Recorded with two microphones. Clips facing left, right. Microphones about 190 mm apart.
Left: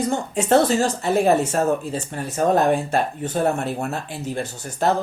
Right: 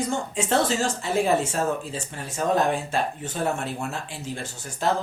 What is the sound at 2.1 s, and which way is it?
Speech, 55° left (ahead or behind).